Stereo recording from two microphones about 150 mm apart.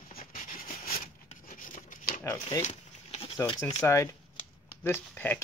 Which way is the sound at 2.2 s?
20° left (ahead or behind).